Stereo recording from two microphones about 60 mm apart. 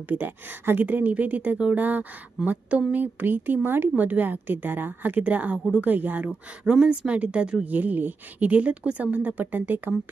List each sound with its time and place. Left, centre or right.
0.1 s a woman's voice: right
6.6 s speech: centre; by 9.9 s right